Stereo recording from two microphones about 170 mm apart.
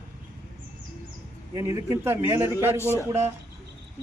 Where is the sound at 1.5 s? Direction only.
15° right (ahead or behind).